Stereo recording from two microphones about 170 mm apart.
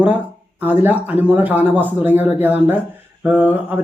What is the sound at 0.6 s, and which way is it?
Speech, 10° right (ahead or behind).